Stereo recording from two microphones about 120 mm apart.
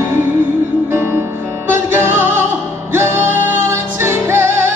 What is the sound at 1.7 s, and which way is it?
Music, 20° right (ahead or behind).